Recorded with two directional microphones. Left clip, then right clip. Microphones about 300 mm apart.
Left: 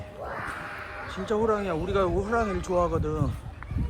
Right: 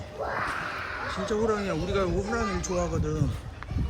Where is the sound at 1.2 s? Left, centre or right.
Centre.